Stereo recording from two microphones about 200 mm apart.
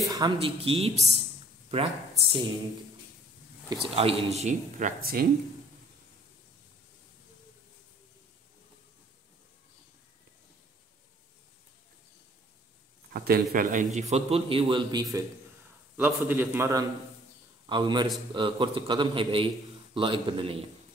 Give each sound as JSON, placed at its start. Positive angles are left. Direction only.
{"t": 0.0, "sound": "a sound", "side_deg": -20}
{"t": 0.4, "sound": "a man's voice", "side_deg": -30}
{"t": 3.9, "sound": "a man's voice", "side_deg": -30}
{"t": 13.1, "sound": "a man's voice", "side_deg": -50}
{"t": 16.0, "sound": "a man's voice", "side_deg": -10}